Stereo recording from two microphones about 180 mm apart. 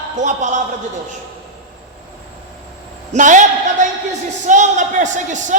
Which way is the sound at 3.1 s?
45° right (ahead or behind).